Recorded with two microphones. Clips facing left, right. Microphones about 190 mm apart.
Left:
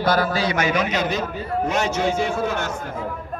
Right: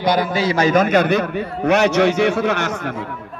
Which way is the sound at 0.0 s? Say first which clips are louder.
Right 2 dB; 15° right (ahead or behind).